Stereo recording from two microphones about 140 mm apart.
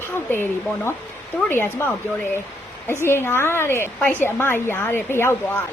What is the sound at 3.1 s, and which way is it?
Speech, 15° left (ahead or behind).